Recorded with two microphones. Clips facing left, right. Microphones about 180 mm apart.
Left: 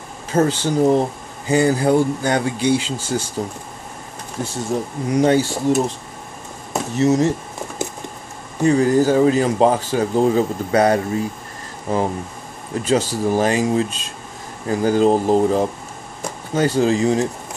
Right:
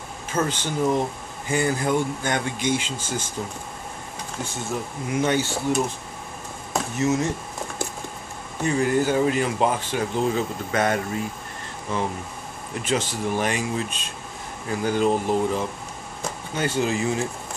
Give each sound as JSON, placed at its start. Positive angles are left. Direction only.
{"t": 0.3, "sound": "speech", "side_deg": 35}
{"t": 4.4, "sound": "speech", "side_deg": 35}
{"t": 5.4, "sound": "speech", "side_deg": 10}
{"t": 6.7, "sound": "a sound", "side_deg": 35}
{"t": 8.6, "sound": "speech", "side_deg": 35}
{"t": 12.8, "sound": "speech", "side_deg": 40}